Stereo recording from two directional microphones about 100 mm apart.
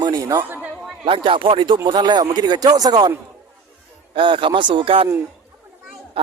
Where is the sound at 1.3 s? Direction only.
60° right (ahead or behind); by 3.1 s 45° right (ahead or behind).